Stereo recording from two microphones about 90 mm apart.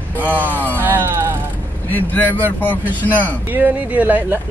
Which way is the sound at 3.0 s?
20° left (ahead or behind).